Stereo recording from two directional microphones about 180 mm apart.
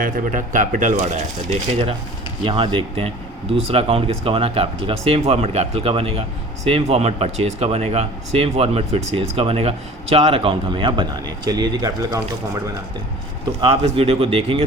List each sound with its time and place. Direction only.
0.0 s speech: 45° right (ahead or behind); by 12.2 s 20° right (ahead or behind)
13.6 s speech: 35° right (ahead or behind)